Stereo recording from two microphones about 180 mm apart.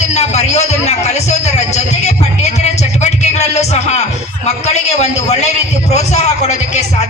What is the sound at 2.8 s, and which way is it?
Music, 40° left (ahead or behind).